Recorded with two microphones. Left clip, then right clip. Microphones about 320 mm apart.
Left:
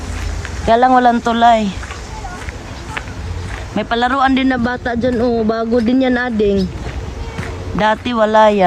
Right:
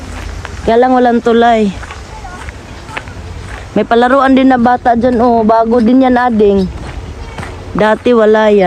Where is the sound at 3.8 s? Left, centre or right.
Centre.